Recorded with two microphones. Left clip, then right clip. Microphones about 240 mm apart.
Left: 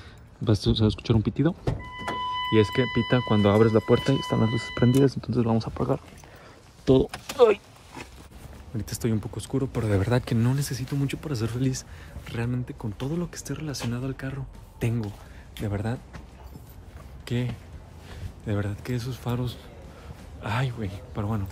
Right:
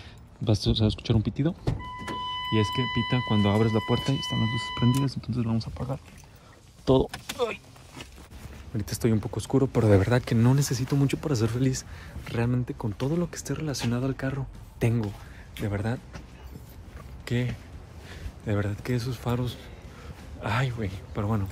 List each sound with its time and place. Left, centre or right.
0.5 s speech: centre
6.9 s speech: centre
8.7 s speech: centre
15.5 s speech: centre
17.2 s speech: centre